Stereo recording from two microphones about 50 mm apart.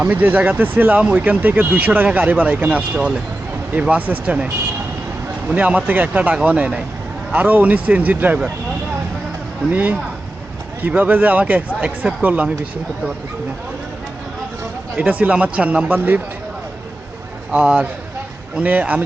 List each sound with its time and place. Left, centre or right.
0.0 s speech: right
5.5 s speech: right
9.7 s speech: right
14.9 s speech: right
15.9 s speech: right
17.5 s speech: right